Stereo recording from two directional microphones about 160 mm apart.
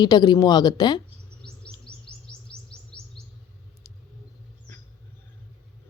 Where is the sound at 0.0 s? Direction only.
25° left (ahead or behind).